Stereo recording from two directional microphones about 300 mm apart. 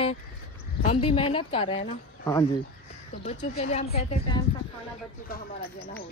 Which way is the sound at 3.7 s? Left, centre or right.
Centre.